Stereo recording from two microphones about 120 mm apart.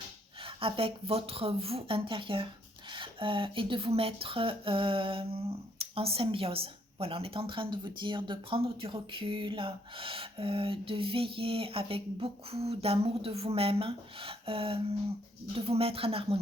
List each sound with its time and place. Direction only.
0.4 s speech: 50° right (ahead or behind)